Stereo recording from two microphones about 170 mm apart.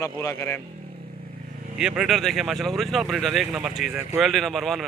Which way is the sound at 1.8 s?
5° right (ahead or behind).